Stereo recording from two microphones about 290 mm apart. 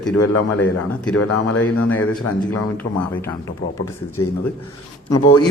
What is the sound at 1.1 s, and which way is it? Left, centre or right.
Speech, left.